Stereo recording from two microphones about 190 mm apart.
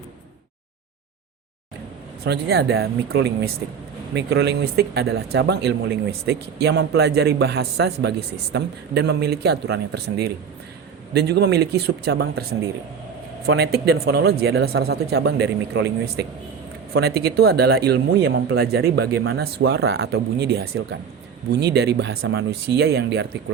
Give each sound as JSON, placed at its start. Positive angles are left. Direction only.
{"t": 2.2, "sound": "speech", "side_deg": -60}
{"t": 22.4, "sound": "speech", "side_deg": -55}